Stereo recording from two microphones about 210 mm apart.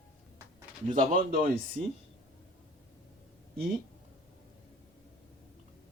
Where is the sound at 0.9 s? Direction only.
40° right (ahead or behind).